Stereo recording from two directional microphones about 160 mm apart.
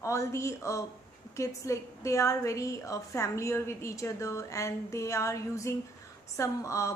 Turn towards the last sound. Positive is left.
turn(degrees=20)  # may be behind; listen again after turning